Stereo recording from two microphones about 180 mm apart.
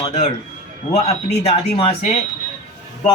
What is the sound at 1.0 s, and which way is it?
Speech, 35° left (ahead or behind).